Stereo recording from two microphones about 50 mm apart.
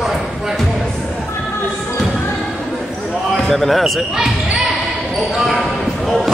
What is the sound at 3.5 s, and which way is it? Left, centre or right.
Speech, centre.